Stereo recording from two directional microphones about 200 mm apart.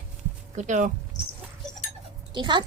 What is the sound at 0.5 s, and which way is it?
Speech, 35° right (ahead or behind).